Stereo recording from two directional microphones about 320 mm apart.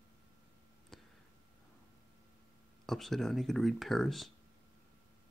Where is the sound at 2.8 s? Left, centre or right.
Centre.